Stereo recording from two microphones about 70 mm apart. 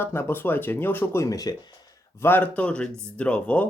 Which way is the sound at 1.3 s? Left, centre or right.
Left.